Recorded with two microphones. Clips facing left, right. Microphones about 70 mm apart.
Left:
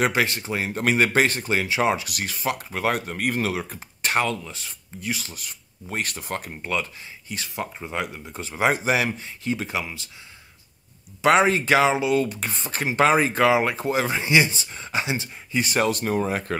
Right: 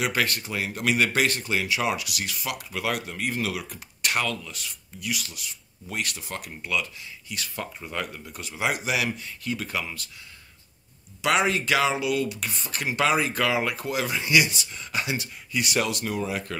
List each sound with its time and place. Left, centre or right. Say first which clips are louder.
0.1 s speech: left 3 dB; centre; by 3.4 s left
3.4 s speech: left 4 dB; left
7.5 s speech: left 4 dB; centre
11.2 s speech: left 5 dB; left